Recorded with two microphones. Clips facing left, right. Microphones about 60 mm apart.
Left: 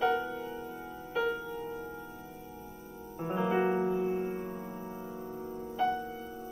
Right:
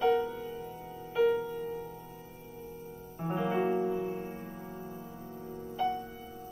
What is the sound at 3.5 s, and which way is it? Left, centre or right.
Music, left.